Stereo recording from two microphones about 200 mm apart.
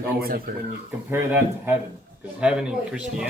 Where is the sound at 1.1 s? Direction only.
10° right (ahead or behind).